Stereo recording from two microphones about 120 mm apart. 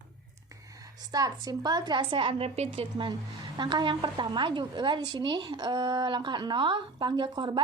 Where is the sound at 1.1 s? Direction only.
30° right (ahead or behind); by 3.1 s 55° right (ahead or behind).